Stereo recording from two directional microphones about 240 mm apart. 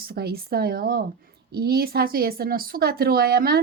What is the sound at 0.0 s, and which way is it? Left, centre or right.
Speech, right.